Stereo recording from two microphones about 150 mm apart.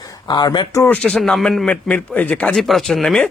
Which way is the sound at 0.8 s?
10° left (ahead or behind).